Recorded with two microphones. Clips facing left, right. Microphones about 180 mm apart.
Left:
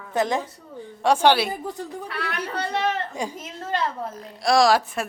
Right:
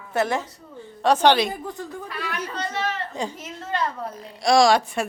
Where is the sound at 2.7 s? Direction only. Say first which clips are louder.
Left 3 dB; 15° left (ahead or behind).